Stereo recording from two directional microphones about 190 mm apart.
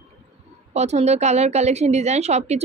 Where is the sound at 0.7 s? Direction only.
35° right (ahead or behind).